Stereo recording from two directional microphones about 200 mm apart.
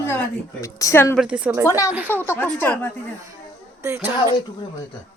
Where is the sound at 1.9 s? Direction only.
10° right (ahead or behind).